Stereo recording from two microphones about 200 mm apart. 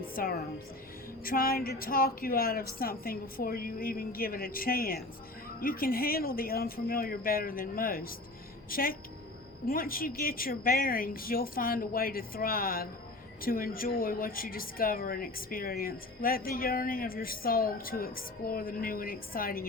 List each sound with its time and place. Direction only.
0.2 s a woman's voice: 50° left (ahead or behind)